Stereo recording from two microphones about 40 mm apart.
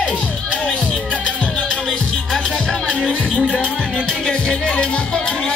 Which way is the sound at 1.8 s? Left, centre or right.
Centre.